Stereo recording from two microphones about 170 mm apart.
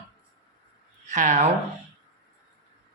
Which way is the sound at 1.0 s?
45° right (ahead or behind).